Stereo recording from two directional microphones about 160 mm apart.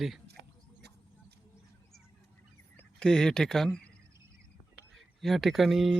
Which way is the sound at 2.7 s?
5° left (ahead or behind).